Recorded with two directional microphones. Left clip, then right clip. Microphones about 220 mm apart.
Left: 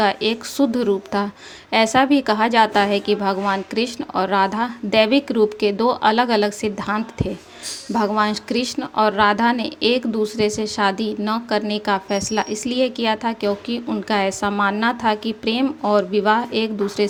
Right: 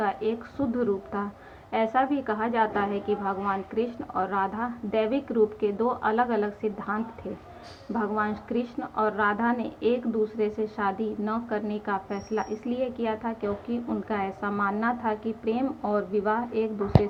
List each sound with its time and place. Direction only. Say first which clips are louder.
0.0 s a woman's voice: left 9 dB; 45° left (ahead or behind)